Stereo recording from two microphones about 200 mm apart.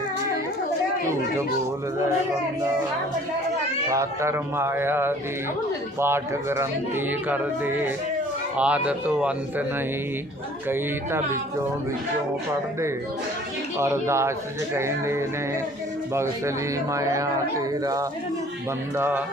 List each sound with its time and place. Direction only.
3.9 s speech: 15° right (ahead or behind)
13.7 s speech: 15° right (ahead or behind)
16.9 s speech: 15° right (ahead or behind)